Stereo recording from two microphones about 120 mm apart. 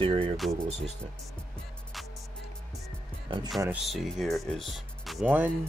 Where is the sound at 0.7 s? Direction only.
65° right (ahead or behind).